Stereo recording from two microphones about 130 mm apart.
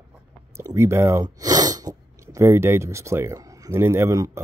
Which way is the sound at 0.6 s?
20° right (ahead or behind).